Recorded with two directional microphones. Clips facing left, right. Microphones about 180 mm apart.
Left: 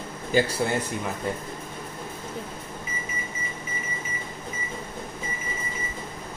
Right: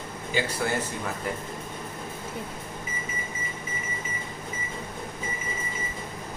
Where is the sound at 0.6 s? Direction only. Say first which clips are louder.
Left 2 dB; 25° left (ahead or behind).